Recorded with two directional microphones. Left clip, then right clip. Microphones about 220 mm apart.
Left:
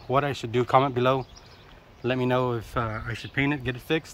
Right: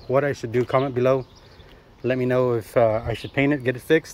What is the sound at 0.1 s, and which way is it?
Speech, centre (ahead or behind).